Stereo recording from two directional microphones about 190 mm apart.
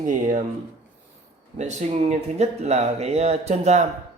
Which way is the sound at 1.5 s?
40° right (ahead or behind).